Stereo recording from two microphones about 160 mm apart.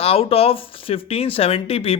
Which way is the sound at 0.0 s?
35° left (ahead or behind).